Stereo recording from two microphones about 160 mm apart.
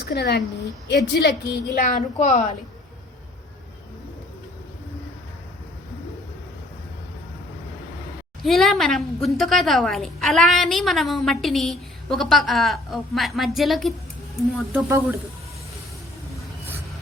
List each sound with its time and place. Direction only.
0.0 s a woman's voice: 90° left
1.8 s a woman's voice: 55° left (ahead or behind)
8.4 s a woman's voice: centre (ahead or behind)
14.7 s speech: 15° right (ahead or behind)